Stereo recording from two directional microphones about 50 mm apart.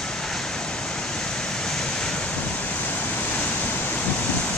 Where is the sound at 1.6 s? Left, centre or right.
Centre.